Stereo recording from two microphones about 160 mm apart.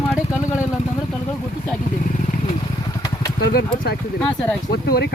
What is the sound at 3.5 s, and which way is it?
Speech, 75° left (ahead or behind).